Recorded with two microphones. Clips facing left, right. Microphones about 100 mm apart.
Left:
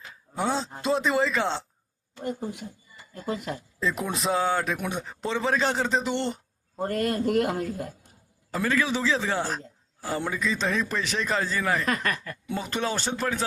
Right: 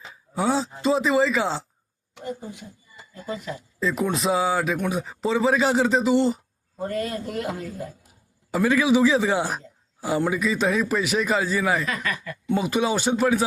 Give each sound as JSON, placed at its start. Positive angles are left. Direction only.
{"t": 0.1, "sound": "speech", "side_deg": 0}
{"t": 2.2, "sound": "a man's voice", "side_deg": 55}
{"t": 3.8, "sound": "a man's voice", "side_deg": 0}
{"t": 6.8, "sound": "a man's voice", "side_deg": 55}
{"t": 8.0, "sound": "a sound", "side_deg": -10}
{"t": 10.3, "sound": "a man's voice", "side_deg": -10}
{"t": 11.9, "sound": "speech", "side_deg": 50}
{"t": 12.5, "sound": "a man's voice", "side_deg": -5}